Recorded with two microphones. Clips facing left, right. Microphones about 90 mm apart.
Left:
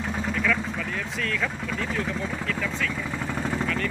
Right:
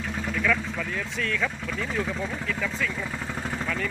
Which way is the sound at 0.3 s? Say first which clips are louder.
Right 2 dB; centre (ahead or behind).